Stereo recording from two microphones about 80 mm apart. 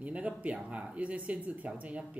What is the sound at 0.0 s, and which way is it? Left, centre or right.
Speech, centre.